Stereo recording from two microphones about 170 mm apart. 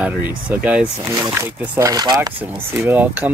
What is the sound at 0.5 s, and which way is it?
Speech, 5° right (ahead or behind).